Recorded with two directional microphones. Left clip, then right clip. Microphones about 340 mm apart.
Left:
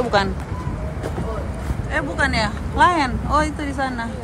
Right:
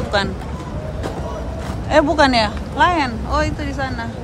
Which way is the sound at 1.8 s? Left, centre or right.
Centre.